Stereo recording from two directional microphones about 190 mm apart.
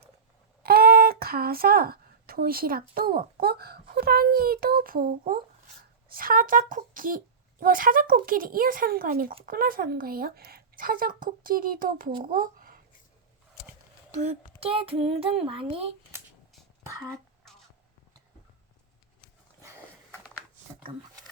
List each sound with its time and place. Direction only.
0.6 s a woman's voice: 50° right (ahead or behind)
14.1 s speech: 35° right (ahead or behind)
17.4 s a sound: centre (ahead or behind)